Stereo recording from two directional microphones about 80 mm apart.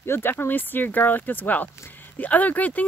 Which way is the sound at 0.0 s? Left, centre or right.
Left.